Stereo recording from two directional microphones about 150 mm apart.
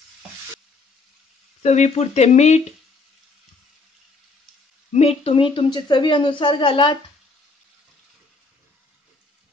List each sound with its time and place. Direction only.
1.6 s speech: 50° left (ahead or behind)
4.9 s a woman's voice: 40° left (ahead or behind)